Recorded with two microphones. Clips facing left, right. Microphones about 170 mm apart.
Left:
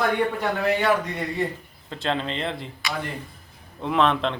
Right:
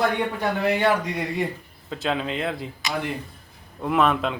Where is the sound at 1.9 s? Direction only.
5° right (ahead or behind).